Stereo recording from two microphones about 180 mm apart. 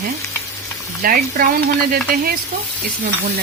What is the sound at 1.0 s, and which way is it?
Speech, 55° right (ahead or behind).